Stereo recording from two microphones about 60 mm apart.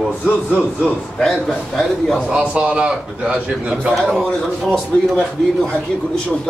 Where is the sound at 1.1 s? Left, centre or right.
Centre.